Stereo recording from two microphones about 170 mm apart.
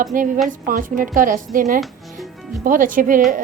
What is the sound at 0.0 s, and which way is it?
A woman's voice, 50° right (ahead or behind).